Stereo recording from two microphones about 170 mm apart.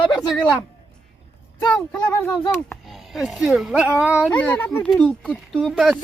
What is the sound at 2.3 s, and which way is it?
Speech, 25° left (ahead or behind).